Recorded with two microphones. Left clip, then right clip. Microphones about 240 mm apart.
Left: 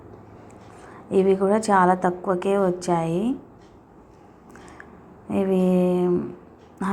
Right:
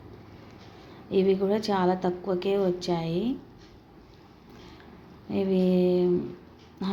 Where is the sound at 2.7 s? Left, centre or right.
Centre.